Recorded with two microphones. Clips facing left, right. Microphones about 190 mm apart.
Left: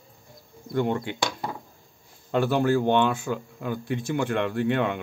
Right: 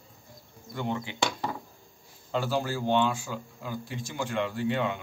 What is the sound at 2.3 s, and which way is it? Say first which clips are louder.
Speech: left 7 dB; 60° left (ahead or behind).